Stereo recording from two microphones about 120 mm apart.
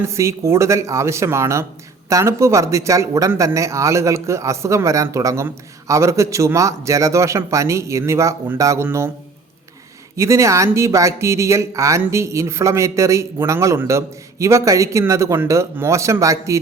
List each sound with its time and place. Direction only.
0.0 s speech: 25° right (ahead or behind)
10.2 s speech: 25° right (ahead or behind)